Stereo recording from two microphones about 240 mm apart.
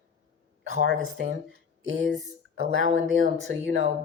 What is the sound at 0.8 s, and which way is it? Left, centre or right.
Speech, right.